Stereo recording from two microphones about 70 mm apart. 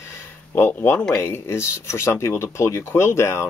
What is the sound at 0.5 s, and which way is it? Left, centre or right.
Speech, left.